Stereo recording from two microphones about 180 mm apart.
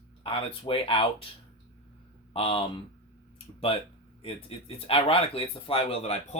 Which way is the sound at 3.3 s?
30° left (ahead or behind).